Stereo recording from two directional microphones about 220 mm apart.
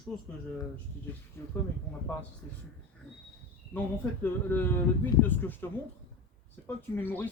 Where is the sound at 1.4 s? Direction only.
10° left (ahead or behind).